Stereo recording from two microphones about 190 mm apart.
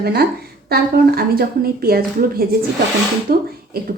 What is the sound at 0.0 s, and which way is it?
A woman's voice, 55° right (ahead or behind).